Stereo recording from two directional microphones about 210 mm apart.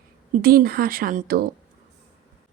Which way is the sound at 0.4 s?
45° right (ahead or behind).